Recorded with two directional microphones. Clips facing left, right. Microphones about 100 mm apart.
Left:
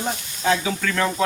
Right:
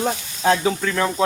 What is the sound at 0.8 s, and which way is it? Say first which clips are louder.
Speech: right 1 dB; 20° right (ahead or behind).